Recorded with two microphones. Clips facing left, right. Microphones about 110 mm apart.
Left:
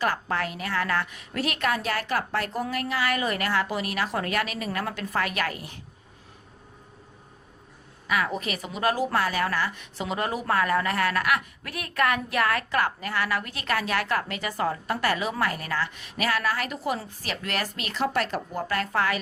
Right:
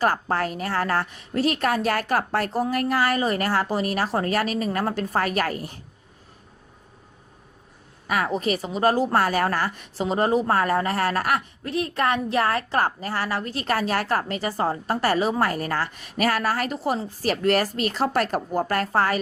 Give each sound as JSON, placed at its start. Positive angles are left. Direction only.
{"t": 0.0, "sound": "a woman's voice", "side_deg": -40}
{"t": 8.0, "sound": "a woman's voice", "side_deg": -45}